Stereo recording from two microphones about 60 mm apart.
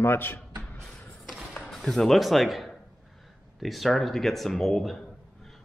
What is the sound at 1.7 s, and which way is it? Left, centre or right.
A man's voice, centre.